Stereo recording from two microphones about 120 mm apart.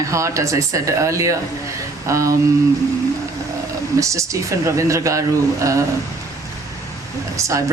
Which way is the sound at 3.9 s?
25° right (ahead or behind).